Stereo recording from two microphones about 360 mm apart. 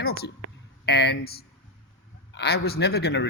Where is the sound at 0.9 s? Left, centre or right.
Left.